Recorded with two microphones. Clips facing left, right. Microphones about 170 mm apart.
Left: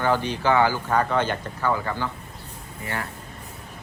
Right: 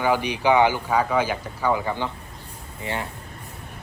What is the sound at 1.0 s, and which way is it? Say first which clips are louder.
A man's voice: right 1 dB; 5° right (ahead or behind).